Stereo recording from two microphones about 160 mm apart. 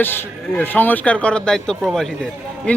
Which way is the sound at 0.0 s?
15° left (ahead or behind).